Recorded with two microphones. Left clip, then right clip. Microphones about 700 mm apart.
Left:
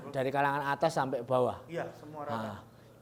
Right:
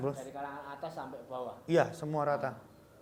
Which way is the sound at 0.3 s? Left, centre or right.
Left.